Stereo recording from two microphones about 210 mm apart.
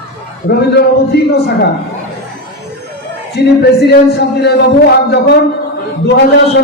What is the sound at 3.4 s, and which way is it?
Speech, 50° left (ahead or behind).